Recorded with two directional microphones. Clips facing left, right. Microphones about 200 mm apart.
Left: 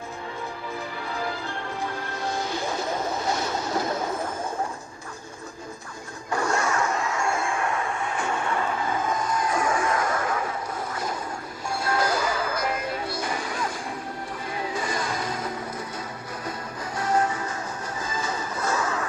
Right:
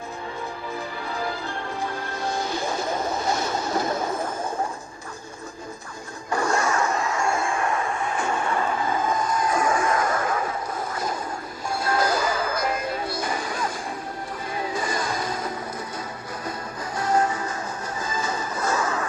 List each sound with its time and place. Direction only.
1.1 s music: 40° right (ahead or behind)
6.3 s music: 35° right (ahead or behind)
17.0 s music: 40° right (ahead or behind)